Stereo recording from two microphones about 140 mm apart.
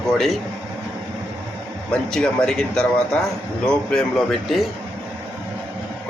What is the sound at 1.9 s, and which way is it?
A man's voice, 5° left (ahead or behind).